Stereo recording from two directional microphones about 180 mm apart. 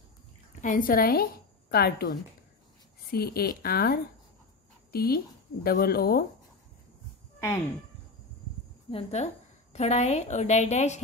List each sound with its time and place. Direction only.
0.6 s a woman's voice: 50° left (ahead or behind)
7.3 s speech: 15° left (ahead or behind)
8.9 s a woman's voice: 40° left (ahead or behind)